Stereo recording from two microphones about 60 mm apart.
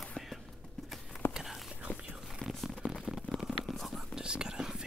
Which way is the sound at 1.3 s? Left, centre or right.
Centre.